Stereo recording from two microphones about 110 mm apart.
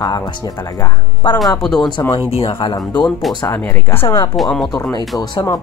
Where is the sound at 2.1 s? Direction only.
60° left (ahead or behind).